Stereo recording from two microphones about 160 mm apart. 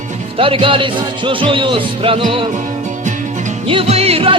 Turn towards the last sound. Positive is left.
turn(degrees=-40)  # may be behind; listen again after turning